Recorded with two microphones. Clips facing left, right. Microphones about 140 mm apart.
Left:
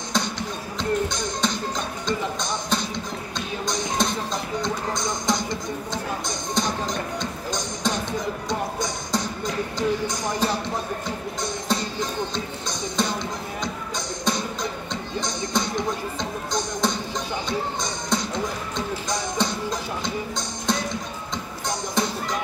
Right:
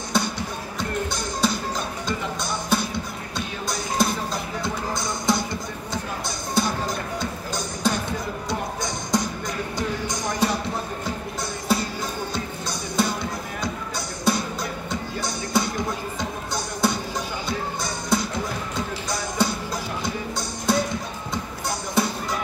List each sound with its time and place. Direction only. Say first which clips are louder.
0.1 s music: right 1 dB; 10° right (ahead or behind)
9.1 s music: right 1 dB; 15° right (ahead or behind)
11.7 s music: right 3 dB; 10° right (ahead or behind)
18.8 s basketball bounce: left 3 dB; 10° right (ahead or behind)
20.7 s music: right 3 dB; 10° right (ahead or behind)